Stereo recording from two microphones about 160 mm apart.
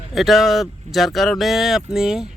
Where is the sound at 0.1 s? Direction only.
Centre (ahead or behind).